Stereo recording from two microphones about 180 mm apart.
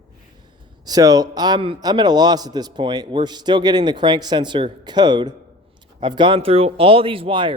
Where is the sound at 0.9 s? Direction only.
20° right (ahead or behind).